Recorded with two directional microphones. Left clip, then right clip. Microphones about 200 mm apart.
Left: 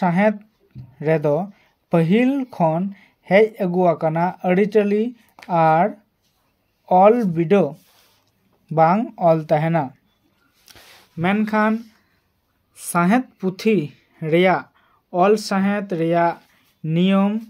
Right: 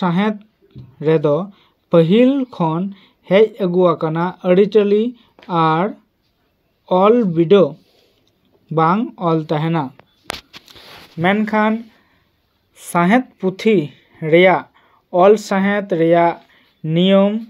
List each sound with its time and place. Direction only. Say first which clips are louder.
0.0 s speech: left 1 dB; 10° left (ahead or behind)
8.7 s speech: even; 15° left (ahead or behind)
10.7 s a sound: right 7 dB; 15° left (ahead or behind)
12.7 s speech: right 4 dB; 15° left (ahead or behind)